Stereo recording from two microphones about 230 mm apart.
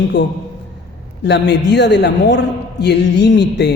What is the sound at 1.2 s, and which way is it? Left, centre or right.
A man's voice, left.